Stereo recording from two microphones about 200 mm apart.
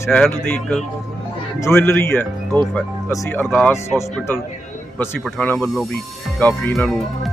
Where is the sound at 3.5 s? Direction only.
Centre (ahead or behind).